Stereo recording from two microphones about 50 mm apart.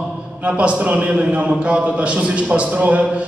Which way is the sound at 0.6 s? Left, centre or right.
Right.